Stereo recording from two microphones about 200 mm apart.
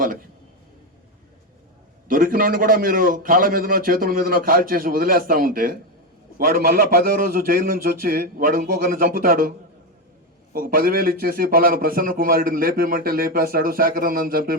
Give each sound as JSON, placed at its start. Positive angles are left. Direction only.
{"t": 0.0, "sound": "a man's voice", "side_deg": -45}
{"t": 2.0, "sound": "a man's voice", "side_deg": -45}
{"t": 10.5, "sound": "a man's voice", "side_deg": -45}